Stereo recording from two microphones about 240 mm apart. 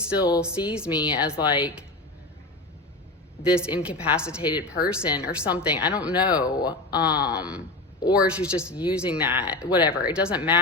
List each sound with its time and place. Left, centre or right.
0.3 s speech: centre
3.4 s speech: centre
6.2 s speech: centre
7.3 s speech: centre